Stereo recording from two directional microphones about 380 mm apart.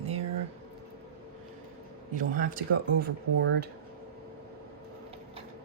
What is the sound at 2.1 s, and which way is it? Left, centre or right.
Speech, right.